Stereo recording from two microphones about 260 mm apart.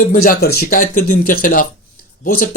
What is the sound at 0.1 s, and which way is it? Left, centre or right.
Speech, left.